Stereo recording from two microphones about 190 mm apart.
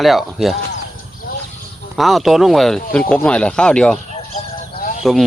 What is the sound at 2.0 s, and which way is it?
Speech, centre (ahead or behind).